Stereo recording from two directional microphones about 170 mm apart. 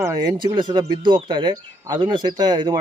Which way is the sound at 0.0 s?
20° right (ahead or behind).